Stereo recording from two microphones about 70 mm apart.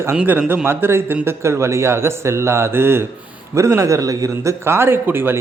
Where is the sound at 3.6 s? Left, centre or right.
Right.